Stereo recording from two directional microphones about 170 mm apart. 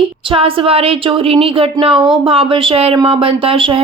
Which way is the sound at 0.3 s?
35° right (ahead or behind).